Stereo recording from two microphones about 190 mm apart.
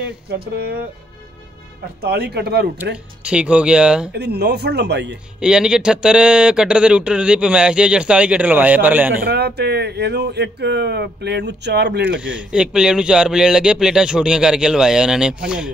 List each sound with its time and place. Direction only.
0.0 s speech: 55° right (ahead or behind)
2.0 s speech: 55° right (ahead or behind)
3.3 s a man's voice: 5° right (ahead or behind)
4.1 s speech: 60° right (ahead or behind)
5.4 s a man's voice: 5° right (ahead or behind)
9.2 s speech: 55° right (ahead or behind)
12.3 s a man's voice: 5° right (ahead or behind)